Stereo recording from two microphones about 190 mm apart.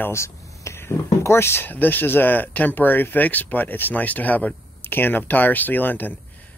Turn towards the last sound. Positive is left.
turn(degrees=10)  # may be behind; listen again after turning